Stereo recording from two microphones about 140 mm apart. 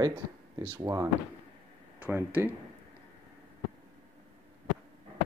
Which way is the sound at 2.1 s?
15° right (ahead or behind).